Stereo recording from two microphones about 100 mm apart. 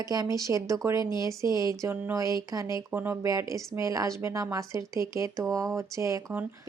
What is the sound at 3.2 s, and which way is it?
Speech, 35° right (ahead or behind).